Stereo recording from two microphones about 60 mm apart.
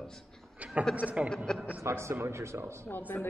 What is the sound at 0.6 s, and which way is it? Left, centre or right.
Speech, right.